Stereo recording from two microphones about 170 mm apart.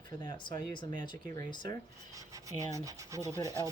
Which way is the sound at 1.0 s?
25° left (ahead or behind).